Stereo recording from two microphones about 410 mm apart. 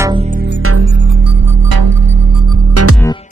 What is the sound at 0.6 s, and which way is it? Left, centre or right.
Music, right.